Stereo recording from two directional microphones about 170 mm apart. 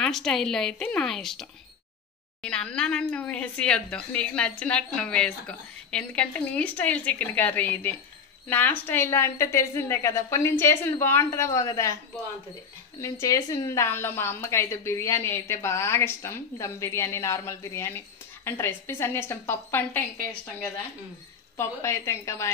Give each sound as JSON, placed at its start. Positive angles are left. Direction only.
{"t": 0.0, "sound": "a woman's voice", "side_deg": 5}
{"t": 13.0, "sound": "a woman's voice", "side_deg": 20}
{"t": 21.5, "sound": "a woman's voice", "side_deg": 15}